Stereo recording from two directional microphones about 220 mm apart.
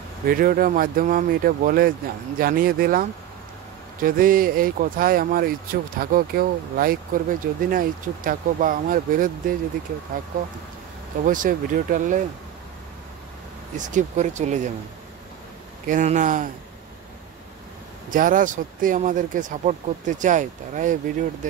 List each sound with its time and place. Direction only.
0.3 s speech: 40° right (ahead or behind)
10.3 s speech: 40° right (ahead or behind)
13.7 s speech: 35° right (ahead or behind)
15.9 s speech: 35° right (ahead or behind)
18.1 s speech: 40° right (ahead or behind)